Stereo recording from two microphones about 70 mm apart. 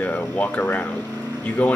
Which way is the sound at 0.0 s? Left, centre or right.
Left.